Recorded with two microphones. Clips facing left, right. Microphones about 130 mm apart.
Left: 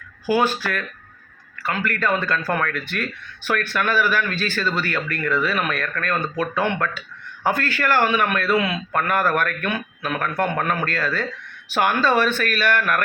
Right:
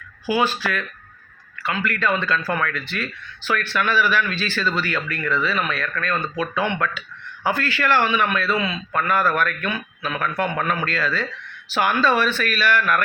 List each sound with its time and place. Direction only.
0.3 s speech: 45° left (ahead or behind)